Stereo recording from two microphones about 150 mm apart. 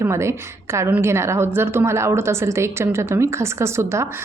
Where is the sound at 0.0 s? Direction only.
20° right (ahead or behind).